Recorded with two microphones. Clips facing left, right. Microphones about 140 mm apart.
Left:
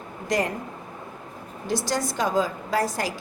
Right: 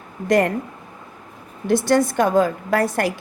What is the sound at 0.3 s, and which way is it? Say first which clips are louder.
Speech: right 8 dB; 60° right (ahead or behind).